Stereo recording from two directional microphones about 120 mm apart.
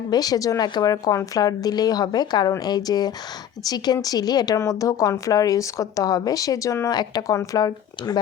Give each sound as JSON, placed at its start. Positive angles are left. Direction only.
{"t": 0.1, "sound": "speech", "side_deg": 30}